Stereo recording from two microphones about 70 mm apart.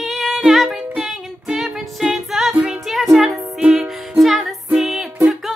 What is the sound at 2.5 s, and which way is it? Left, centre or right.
Music, centre.